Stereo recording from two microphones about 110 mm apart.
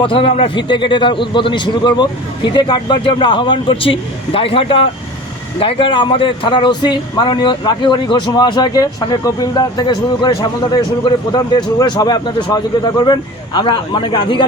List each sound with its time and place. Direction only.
0.0 s a man's voice: 55° left (ahead or behind)